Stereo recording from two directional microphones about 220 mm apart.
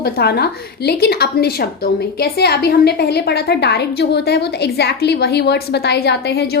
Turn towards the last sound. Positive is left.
turn(degrees=45)  # may be behind; listen again after turning